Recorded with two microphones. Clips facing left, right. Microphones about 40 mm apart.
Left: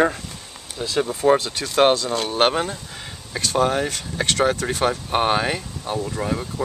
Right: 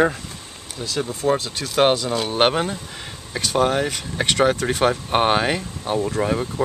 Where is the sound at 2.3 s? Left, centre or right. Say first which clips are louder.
Right 1 dB; centre.